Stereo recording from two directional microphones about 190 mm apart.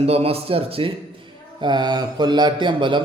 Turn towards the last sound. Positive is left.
turn(degrees=-25)  # may be behind; listen again after turning